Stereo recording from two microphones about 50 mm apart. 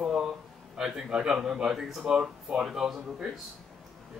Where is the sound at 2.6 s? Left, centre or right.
Centre.